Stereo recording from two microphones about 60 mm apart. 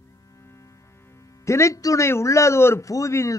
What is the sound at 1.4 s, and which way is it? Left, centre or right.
Speech, left.